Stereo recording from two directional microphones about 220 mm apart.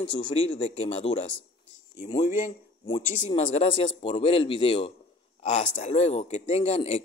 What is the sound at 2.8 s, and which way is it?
Speech, 20° left (ahead or behind).